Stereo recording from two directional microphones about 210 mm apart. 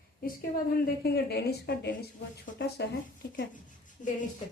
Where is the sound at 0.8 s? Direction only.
50° left (ahead or behind).